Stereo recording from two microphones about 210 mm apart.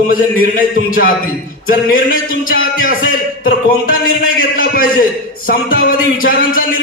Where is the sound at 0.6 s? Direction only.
40° left (ahead or behind).